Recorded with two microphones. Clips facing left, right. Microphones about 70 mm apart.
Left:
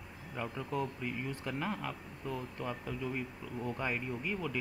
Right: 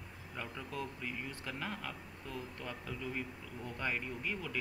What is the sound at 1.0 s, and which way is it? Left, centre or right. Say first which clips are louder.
Speech: left 4 dB; centre.